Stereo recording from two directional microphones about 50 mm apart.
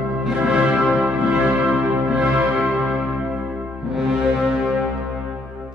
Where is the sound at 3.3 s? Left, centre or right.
Centre.